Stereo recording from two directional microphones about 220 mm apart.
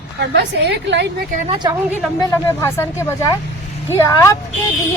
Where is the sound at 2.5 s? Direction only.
10° left (ahead or behind).